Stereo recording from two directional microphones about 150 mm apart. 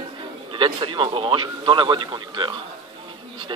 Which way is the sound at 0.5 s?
35° right (ahead or behind).